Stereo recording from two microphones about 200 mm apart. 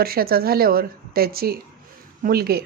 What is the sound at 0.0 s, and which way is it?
Speech, 50° right (ahead or behind).